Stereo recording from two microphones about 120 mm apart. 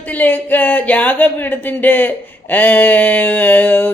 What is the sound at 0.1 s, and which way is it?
Speech, 15° left (ahead or behind).